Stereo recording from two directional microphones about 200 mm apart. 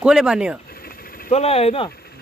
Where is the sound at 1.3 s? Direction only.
30° left (ahead or behind).